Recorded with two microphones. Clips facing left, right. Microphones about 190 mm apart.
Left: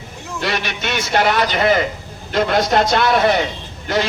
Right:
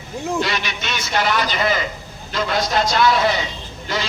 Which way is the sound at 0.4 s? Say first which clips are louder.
Left 3 dB; 60° left (ahead or behind).